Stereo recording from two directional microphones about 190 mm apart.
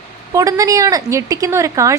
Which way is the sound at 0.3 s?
20° right (ahead or behind).